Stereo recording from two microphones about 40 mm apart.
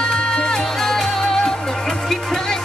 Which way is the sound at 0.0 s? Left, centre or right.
Centre.